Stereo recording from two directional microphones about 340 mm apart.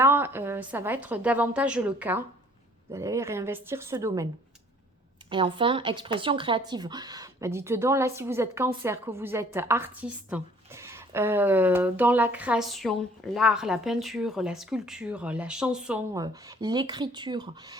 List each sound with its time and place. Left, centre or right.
0.0 s a woman's voice: centre
5.3 s speech: centre